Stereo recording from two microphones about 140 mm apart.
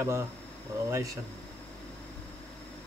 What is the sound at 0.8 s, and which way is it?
Speech, 20° right (ahead or behind).